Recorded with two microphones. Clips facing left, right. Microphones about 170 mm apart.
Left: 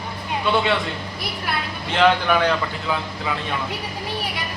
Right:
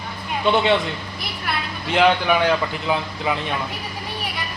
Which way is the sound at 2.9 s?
20° right (ahead or behind).